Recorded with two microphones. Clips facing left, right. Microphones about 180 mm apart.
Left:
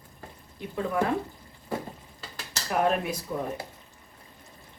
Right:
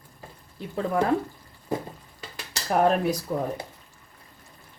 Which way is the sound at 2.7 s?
40° right (ahead or behind).